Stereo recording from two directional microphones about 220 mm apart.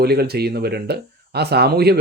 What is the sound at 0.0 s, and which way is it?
Speech, 45° right (ahead or behind).